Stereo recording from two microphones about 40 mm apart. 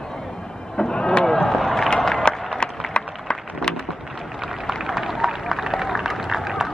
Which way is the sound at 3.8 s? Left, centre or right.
Centre.